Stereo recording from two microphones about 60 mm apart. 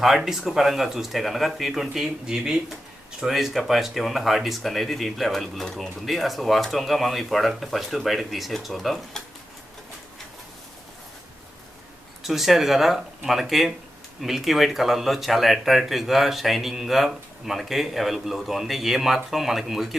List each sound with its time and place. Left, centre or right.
0.0 s speech: centre
12.2 s speech: centre